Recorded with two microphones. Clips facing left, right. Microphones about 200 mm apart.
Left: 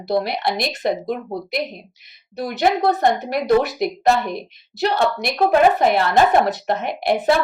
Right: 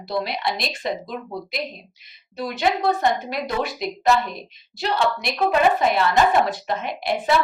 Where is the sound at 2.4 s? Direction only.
60° left (ahead or behind).